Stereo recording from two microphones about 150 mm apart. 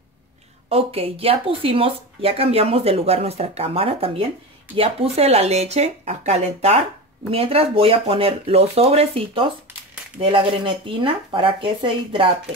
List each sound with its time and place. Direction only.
0.7 s speech: 40° right (ahead or behind)